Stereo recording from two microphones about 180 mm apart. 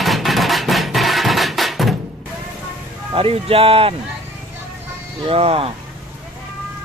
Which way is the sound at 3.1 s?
30° right (ahead or behind).